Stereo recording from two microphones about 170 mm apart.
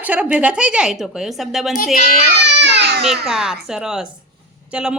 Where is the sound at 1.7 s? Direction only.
55° left (ahead or behind).